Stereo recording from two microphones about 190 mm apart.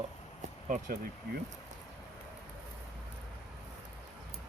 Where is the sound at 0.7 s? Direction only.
45° right (ahead or behind).